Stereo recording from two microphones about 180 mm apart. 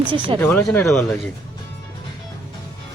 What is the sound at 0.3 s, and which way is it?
Speech, 10° left (ahead or behind).